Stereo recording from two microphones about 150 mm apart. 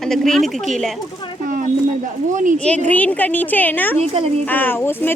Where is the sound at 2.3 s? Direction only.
60° right (ahead or behind).